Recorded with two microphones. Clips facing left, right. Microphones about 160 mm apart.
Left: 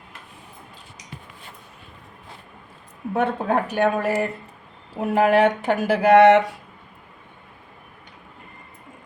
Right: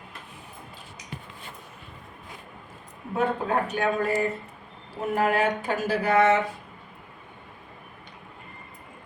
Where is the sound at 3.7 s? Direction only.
75° left (ahead or behind); by 6.5 s 90° left.